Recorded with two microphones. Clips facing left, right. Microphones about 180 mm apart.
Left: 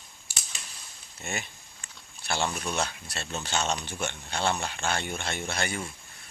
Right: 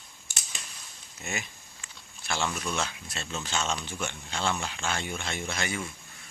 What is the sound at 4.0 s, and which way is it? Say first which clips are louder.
Speech: left 2 dB; 55° left (ahead or behind).